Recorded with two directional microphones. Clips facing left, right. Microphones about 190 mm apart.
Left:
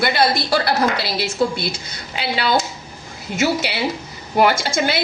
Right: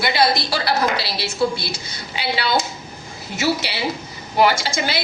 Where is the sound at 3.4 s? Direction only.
50° left (ahead or behind).